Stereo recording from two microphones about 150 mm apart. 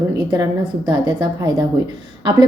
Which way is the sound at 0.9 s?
30° right (ahead or behind).